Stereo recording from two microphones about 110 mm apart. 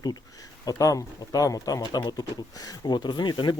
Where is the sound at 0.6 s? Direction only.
35° left (ahead or behind).